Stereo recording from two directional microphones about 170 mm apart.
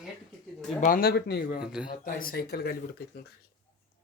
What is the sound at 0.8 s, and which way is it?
Speech, 55° left (ahead or behind).